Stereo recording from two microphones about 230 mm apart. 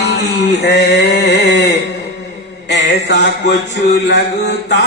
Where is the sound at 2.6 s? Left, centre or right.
Left.